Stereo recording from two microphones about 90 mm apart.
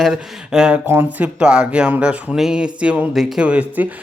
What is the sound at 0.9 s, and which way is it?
A man's voice, 20° right (ahead or behind).